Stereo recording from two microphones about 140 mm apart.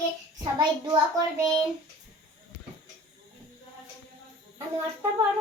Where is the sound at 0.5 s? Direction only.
30° right (ahead or behind).